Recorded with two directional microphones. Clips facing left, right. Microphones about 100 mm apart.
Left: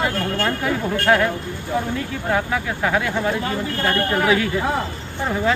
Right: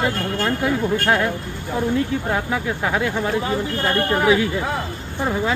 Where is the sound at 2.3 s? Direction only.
15° right (ahead or behind).